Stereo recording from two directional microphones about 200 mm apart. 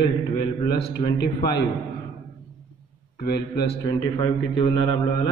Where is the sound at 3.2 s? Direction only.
55° left (ahead or behind).